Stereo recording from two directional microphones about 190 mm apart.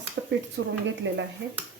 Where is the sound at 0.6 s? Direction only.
60° right (ahead or behind).